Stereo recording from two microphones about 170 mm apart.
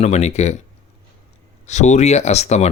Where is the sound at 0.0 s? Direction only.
40° left (ahead or behind).